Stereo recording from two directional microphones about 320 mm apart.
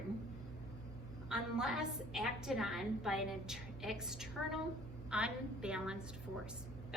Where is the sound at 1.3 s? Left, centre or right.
Centre.